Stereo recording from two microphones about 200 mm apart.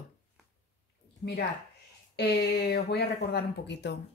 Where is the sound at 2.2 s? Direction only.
55° left (ahead or behind).